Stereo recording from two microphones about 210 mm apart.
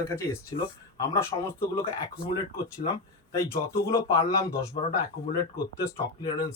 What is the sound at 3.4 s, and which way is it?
Speech, 10° left (ahead or behind).